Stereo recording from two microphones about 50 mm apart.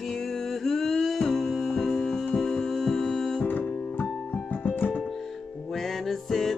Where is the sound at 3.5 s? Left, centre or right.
Left.